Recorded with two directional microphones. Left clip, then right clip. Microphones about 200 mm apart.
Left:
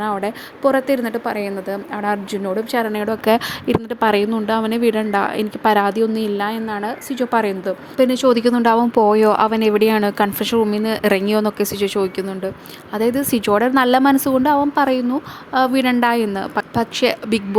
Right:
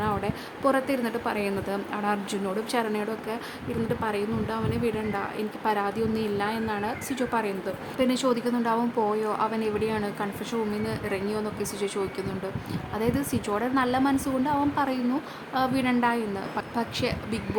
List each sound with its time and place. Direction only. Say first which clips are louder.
0.0 s a woman's voice: left 7 dB; 30° left (ahead or behind)
3.2 s a woman's voice: left 16 dB; 45° left (ahead or behind)